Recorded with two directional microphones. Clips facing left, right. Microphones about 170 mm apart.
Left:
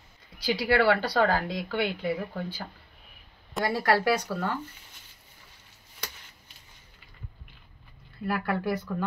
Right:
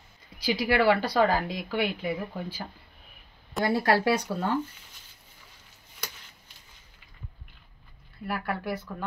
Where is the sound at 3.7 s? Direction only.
25° right (ahead or behind).